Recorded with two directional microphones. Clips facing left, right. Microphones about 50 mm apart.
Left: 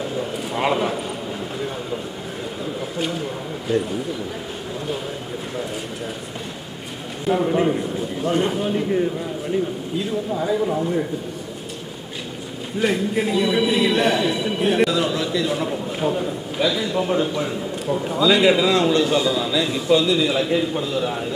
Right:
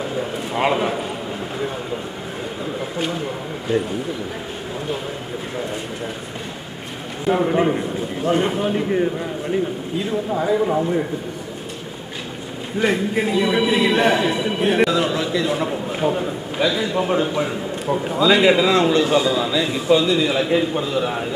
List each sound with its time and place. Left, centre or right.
0.0 s a sound: centre
7.3 s a man's voice: centre
10.3 s speech: right
12.8 s a man's voice: centre
19.0 s a man's voice: centre